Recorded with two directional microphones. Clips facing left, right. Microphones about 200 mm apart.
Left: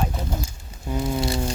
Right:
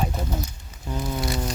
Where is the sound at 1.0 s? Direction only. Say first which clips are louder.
Left 3 dB; 25° left (ahead or behind).